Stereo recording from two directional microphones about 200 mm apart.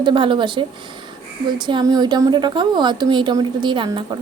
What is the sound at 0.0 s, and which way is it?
A woman's voice, 25° right (ahead or behind).